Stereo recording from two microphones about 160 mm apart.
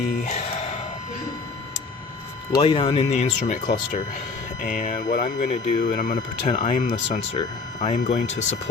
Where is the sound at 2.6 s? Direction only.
35° left (ahead or behind).